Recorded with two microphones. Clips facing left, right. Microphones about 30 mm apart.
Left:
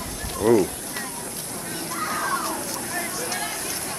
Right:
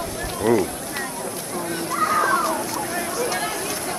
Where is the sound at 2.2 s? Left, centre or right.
Centre.